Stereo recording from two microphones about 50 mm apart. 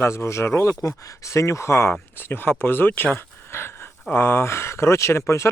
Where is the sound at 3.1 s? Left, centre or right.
Left.